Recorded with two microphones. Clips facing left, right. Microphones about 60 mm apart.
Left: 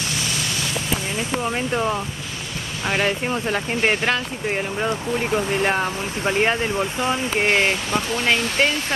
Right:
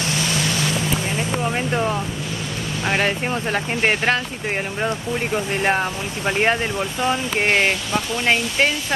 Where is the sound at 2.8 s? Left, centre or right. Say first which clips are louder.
Right 1 dB; centre.